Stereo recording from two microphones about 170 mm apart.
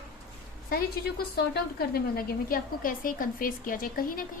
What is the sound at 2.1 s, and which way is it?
A woman's voice, 55° left (ahead or behind).